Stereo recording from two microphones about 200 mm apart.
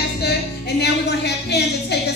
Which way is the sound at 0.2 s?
55° left (ahead or behind).